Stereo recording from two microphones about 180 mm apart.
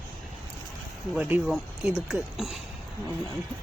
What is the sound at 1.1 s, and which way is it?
Speech, 10° right (ahead or behind).